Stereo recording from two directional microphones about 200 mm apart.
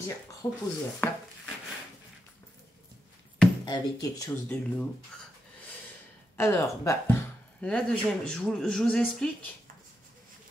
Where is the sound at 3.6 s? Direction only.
20° left (ahead or behind).